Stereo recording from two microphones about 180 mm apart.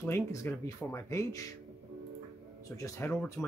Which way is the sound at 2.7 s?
20° left (ahead or behind).